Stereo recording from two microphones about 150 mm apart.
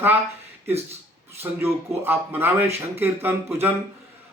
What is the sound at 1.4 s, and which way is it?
Speech, 15° right (ahead or behind).